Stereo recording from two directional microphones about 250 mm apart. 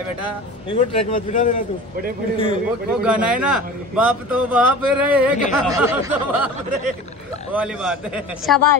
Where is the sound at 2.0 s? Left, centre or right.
Right.